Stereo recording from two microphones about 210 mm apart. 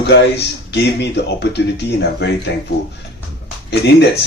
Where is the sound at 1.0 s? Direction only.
55° left (ahead or behind).